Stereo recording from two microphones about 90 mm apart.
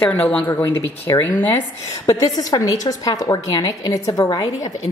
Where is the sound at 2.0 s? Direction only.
45° left (ahead or behind).